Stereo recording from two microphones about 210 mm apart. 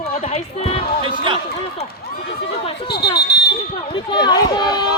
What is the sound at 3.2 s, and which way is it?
Fire alarm, 50° left (ahead or behind).